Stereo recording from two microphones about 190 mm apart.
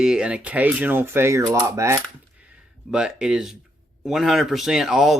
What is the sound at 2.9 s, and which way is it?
Speech, 5° right (ahead or behind).